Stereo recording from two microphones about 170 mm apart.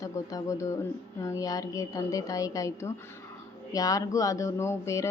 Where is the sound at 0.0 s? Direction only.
20° left (ahead or behind).